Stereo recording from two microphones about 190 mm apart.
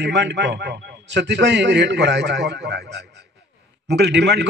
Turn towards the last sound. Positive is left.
turn(degrees=-65)  # may be behind; listen again after turning